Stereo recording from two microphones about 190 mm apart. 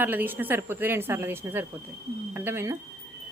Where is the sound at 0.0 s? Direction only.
10° right (ahead or behind).